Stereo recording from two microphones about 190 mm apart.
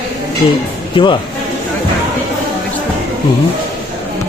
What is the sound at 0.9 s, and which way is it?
Speech, 25° left (ahead or behind).